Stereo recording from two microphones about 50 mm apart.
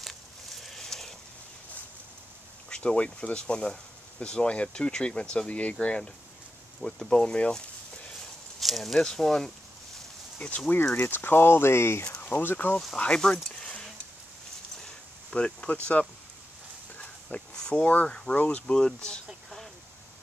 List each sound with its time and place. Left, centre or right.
0.0 s a sound: centre
2.7 s speech: centre
8.5 s speech: centre
10.4 s speech: left
11.1 s speech: left
12.2 s speech: left
12.9 s speech: centre
15.3 s speech: left
17.6 s a sound: centre
17.8 s speech: left
18.7 s speech: centre